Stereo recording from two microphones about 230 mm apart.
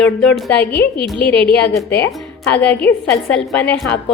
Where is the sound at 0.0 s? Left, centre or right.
Centre.